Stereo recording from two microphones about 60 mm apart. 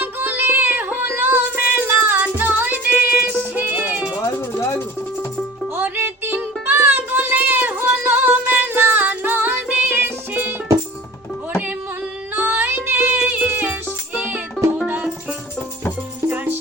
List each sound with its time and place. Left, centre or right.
0.0 s music: right
4.4 s music: left
5.7 s music: right
12.3 s music: right
13.1 s music: right
16.3 s music: right